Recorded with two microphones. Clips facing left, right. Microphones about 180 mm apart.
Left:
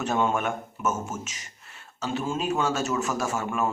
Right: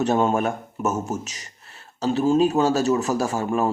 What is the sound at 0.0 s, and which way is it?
Speech, 35° right (ahead or behind).